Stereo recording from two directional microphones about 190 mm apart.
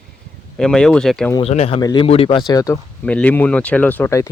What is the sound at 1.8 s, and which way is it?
Speech, 20° left (ahead or behind).